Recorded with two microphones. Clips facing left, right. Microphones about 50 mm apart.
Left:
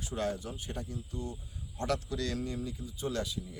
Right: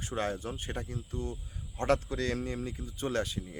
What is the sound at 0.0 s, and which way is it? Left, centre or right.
Speech, right.